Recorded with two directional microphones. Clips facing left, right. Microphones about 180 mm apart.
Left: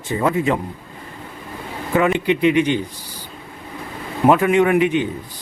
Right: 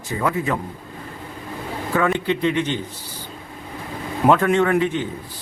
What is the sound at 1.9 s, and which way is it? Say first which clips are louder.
Speech: left 3 dB; 20° left (ahead or behind).